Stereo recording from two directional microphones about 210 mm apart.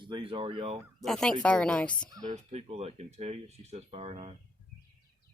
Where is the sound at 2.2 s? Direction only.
30° right (ahead or behind).